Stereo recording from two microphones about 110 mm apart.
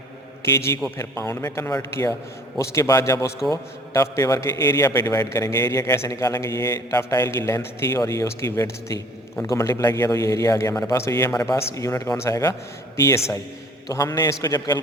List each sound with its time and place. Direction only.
0.4 s a man's voice: 25° left (ahead or behind)